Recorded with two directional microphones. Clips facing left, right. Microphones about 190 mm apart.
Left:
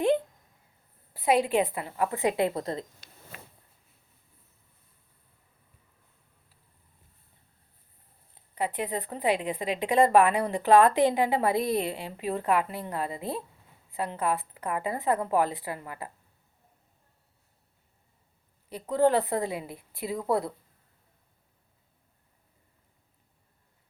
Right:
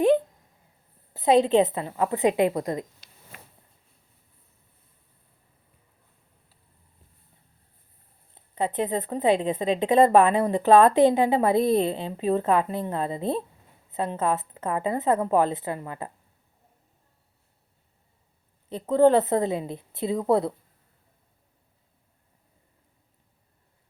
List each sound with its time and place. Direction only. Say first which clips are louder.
1.1 s a woman's voice: right 5 dB; 25° right (ahead or behind)
3.0 s a sound: left 3 dB; 50° left (ahead or behind)
8.5 s a woman's voice: right 5 dB; 25° right (ahead or behind)
18.7 s a woman's voice: right 5 dB; 25° right (ahead or behind)